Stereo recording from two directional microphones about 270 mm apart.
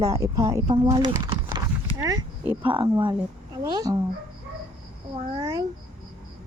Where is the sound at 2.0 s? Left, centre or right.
Centre.